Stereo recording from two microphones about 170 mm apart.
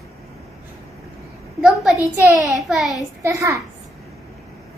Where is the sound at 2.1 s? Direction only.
15° right (ahead or behind).